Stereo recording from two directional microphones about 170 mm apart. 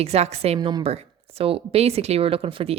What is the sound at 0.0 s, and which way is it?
Speech, 40° right (ahead or behind).